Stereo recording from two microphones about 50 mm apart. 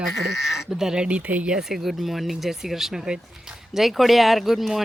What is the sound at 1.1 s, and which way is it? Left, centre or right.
Speech, right.